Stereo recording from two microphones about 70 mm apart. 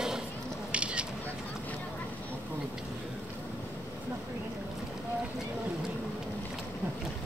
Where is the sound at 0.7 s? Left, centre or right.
Centre.